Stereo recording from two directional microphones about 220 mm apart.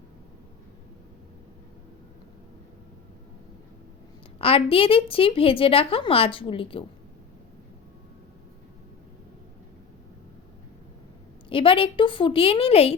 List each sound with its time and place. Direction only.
4.4 s a woman's voice: 25° left (ahead or behind)
11.4 s a woman's voice: 25° left (ahead or behind)